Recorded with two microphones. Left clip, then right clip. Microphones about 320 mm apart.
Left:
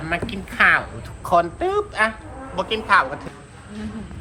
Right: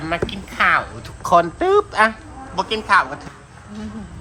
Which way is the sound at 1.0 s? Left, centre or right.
Right.